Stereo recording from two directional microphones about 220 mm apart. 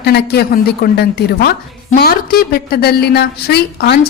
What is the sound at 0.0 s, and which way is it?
A woman's voice, 50° left (ahead or behind).